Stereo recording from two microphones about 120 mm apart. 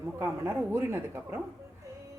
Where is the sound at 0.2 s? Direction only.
20° right (ahead or behind).